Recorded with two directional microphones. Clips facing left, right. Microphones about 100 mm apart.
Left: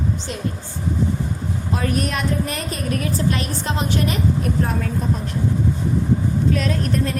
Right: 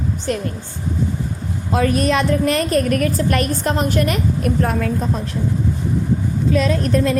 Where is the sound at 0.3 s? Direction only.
55° right (ahead or behind).